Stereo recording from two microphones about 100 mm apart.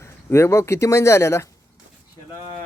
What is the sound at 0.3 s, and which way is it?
Speech, 25° left (ahead or behind).